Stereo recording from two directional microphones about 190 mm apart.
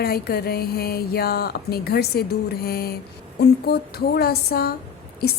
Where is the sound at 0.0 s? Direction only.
55° left (ahead or behind).